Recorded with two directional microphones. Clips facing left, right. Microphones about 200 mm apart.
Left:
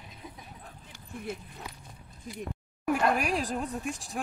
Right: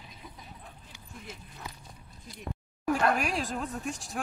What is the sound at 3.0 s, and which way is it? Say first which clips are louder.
A woman's voice: left 1 dB; 5° left (ahead or behind).